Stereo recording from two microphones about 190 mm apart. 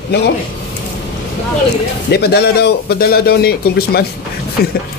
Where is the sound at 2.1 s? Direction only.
60° left (ahead or behind).